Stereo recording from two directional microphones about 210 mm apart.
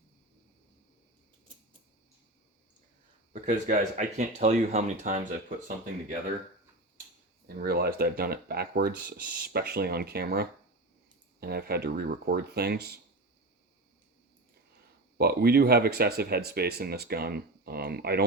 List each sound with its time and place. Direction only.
3.4 s speech: 35° right (ahead or behind)
7.4 s speech: 45° right (ahead or behind)
15.2 s speech: 50° right (ahead or behind)